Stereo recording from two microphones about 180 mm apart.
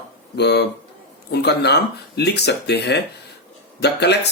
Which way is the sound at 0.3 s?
65° left (ahead or behind).